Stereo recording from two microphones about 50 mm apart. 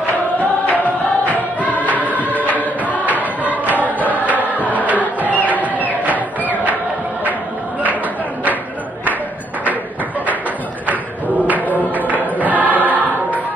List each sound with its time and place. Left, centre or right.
0.4 s music: left
2.0 s music: right
3.1 s choir: right
4.3 s music: right
10.9 s a sound: right
12.4 s choir: right